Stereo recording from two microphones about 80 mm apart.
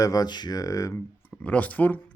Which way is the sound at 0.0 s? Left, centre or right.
Left.